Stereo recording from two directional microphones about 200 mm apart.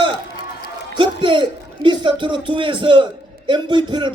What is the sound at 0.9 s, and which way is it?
Speech, 25° right (ahead or behind).